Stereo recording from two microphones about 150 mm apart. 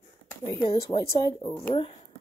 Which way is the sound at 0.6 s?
35° left (ahead or behind).